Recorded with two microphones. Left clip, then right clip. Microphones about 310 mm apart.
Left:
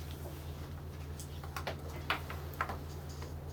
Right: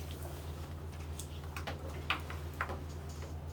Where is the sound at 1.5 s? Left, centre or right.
Centre.